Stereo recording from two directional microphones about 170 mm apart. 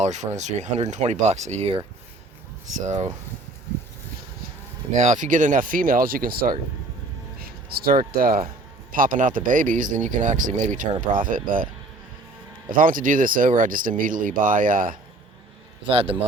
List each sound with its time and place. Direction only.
0.0 s speech: 45° right (ahead or behind)
2.8 s speech: 45° right (ahead or behind)
4.9 s speech: 45° right (ahead or behind)
12.7 s speech: 55° right (ahead or behind)
15.9 s a man's voice: 35° right (ahead or behind)